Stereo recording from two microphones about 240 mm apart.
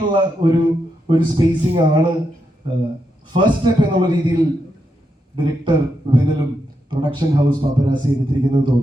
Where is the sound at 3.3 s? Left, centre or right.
Centre.